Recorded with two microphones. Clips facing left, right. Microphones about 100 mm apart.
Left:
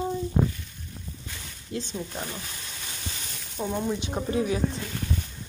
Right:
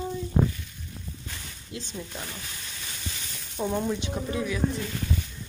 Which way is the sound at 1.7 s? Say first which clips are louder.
Left 5 dB; 30° left (ahead or behind).